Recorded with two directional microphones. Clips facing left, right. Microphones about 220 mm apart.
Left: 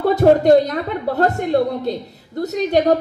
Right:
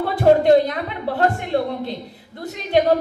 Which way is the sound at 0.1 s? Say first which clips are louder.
Left 2 dB; 45° left (ahead or behind).